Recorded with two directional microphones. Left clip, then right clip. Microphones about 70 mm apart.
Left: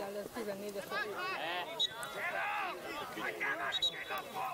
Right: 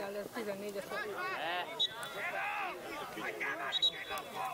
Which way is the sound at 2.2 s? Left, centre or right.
Left.